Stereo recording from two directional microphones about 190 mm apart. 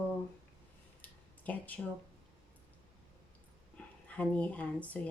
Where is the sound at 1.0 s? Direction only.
10° left (ahead or behind).